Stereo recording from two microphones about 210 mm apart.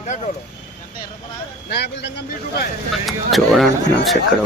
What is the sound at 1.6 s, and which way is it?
Speech, 55° left (ahead or behind).